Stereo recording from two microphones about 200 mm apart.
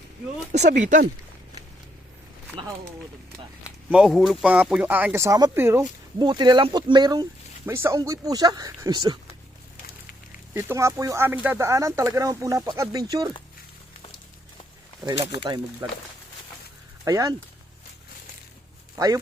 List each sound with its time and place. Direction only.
0.5 s speech: 35° right (ahead or behind)
3.8 s speech: 5° right (ahead or behind); by 9.1 s 20° right (ahead or behind)
10.5 s speech: 10° right (ahead or behind)
15.4 s speech: 20° right (ahead or behind)
17.1 s speech: 15° right (ahead or behind)
18.9 s speech: 15° right (ahead or behind)